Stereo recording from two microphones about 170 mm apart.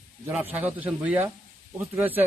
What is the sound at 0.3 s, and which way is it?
Speech, 10° right (ahead or behind).